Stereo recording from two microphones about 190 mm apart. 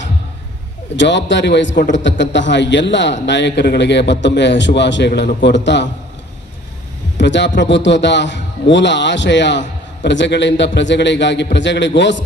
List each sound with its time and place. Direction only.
0.9 s a man's voice: 70° left (ahead or behind)
7.2 s a man's voice: 65° left (ahead or behind)